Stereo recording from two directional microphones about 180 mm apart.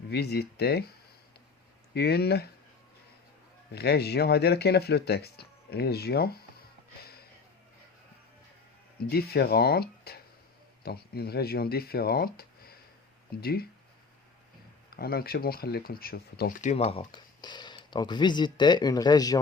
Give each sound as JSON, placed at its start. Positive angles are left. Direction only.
{"t": 0.1, "sound": "speech", "side_deg": 65}
{"t": 1.9, "sound": "speech", "side_deg": 65}
{"t": 3.7, "sound": "speech", "side_deg": 65}
{"t": 9.0, "sound": "speech", "side_deg": 60}
{"t": 14.9, "sound": "speech", "side_deg": 60}
{"t": 16.6, "sound": "speech", "side_deg": 40}